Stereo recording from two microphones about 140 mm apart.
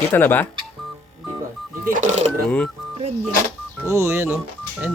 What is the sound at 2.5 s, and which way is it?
Speech, 10° left (ahead or behind).